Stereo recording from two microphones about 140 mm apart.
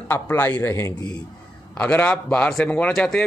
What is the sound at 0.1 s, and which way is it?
A man's voice, 15° left (ahead or behind).